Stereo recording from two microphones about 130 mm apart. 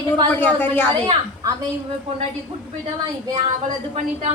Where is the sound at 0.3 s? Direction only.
15° left (ahead or behind).